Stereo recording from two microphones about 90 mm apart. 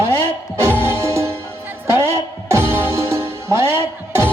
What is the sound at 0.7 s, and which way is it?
Music, 25° right (ahead or behind).